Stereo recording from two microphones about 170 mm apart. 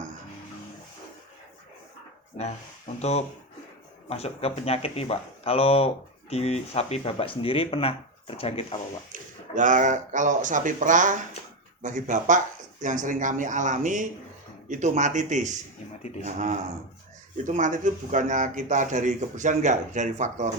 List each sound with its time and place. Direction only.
3.0 s speech: 40° left (ahead or behind)
9.6 s speech: 50° right (ahead or behind)